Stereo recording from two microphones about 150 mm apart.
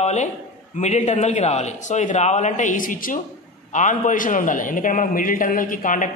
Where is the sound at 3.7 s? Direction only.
55° left (ahead or behind).